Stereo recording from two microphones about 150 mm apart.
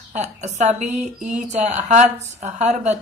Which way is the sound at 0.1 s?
50° right (ahead or behind).